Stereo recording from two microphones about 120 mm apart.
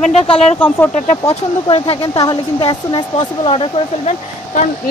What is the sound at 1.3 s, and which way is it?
Speech, 50° left (ahead or behind).